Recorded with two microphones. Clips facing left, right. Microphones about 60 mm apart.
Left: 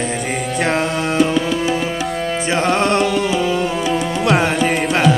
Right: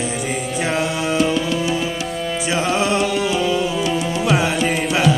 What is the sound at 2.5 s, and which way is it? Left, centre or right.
Music, left.